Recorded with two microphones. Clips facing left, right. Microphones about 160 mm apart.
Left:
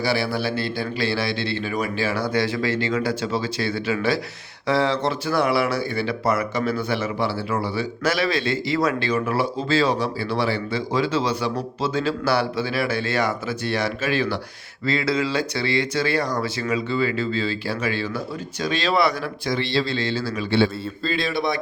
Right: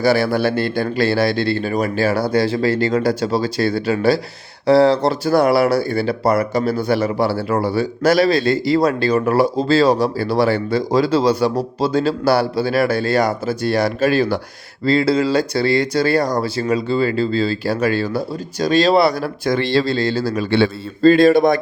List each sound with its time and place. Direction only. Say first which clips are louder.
0.0 s a man's voice: right 7 dB; 45° right (ahead or behind)
19.5 s speech: right 6 dB; 50° right (ahead or behind)